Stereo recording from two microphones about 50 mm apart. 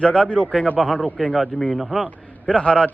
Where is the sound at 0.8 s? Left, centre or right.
Centre.